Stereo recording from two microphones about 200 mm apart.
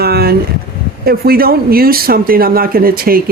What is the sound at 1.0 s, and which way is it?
Speech, 50° right (ahead or behind).